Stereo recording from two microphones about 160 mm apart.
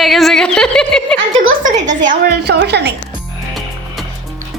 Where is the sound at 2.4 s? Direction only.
90° right.